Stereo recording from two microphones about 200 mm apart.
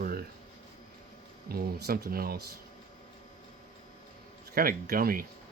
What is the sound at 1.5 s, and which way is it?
Speech, 50° right (ahead or behind).